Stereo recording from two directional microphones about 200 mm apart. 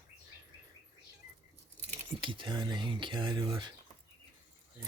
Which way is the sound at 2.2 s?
25° right (ahead or behind).